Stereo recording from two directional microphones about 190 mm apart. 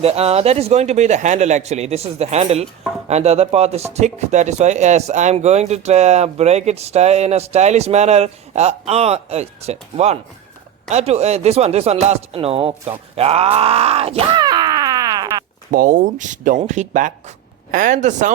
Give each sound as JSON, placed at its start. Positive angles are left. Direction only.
{"t": 0.0, "sound": "speech", "side_deg": -30}
{"t": 10.8, "sound": "speech", "side_deg": -35}
{"t": 13.1, "sound": "groan", "side_deg": -30}
{"t": 15.7, "sound": "speech", "side_deg": -45}